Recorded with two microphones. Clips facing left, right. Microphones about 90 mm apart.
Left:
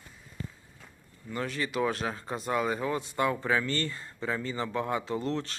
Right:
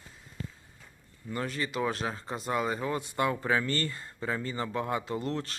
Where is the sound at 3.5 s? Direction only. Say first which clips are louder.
Even; 35° right (ahead or behind).